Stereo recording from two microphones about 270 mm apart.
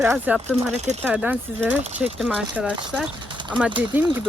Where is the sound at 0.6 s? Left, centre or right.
Right.